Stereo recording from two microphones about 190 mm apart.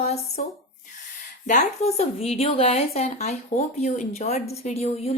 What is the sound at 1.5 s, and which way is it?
Speech, 35° left (ahead or behind).